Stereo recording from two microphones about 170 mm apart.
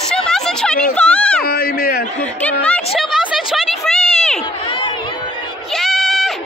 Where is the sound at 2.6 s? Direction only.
5° left (ahead or behind).